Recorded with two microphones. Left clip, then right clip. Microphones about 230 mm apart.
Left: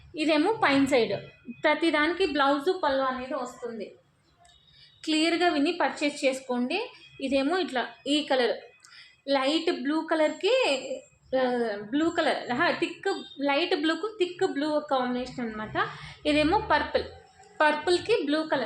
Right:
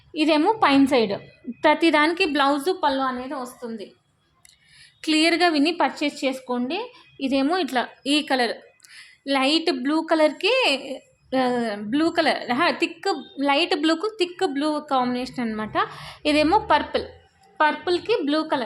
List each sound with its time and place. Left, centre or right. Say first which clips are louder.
0.1 s a woman's voice: right 5 dB; right
4.9 s a woman's voice: right 6 dB; right
17.6 s a woman's voice: right 3 dB; right